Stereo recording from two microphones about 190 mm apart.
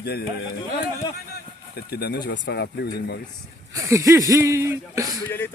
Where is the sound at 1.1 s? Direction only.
55° left (ahead or behind).